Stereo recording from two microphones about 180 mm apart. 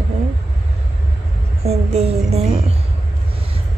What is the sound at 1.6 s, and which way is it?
Speech, 35° right (ahead or behind).